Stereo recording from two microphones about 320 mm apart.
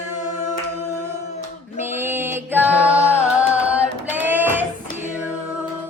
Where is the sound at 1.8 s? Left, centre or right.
Centre.